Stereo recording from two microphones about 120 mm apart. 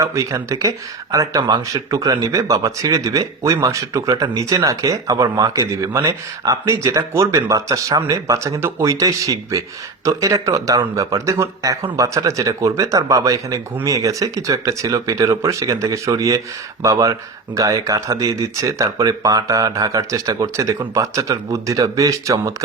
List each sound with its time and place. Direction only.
0.0 s speech: 25° right (ahead or behind)